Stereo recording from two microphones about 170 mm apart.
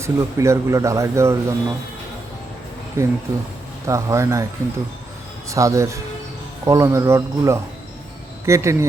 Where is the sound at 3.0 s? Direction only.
15° right (ahead or behind).